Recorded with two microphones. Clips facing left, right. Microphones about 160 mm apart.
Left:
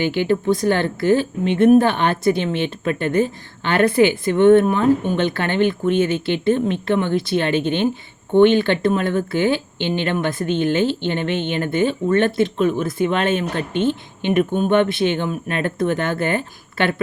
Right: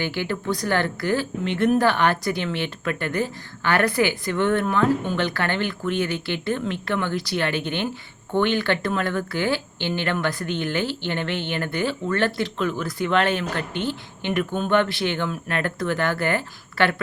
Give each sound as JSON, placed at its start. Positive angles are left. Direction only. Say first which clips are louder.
{"t": 0.0, "sound": "a woman's voice", "louder": "left 8 dB", "side_deg": 20}